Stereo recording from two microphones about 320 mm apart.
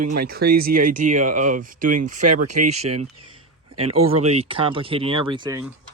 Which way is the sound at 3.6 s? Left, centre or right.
Centre.